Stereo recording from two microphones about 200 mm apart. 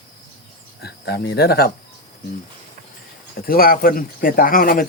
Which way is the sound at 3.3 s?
45° left (ahead or behind).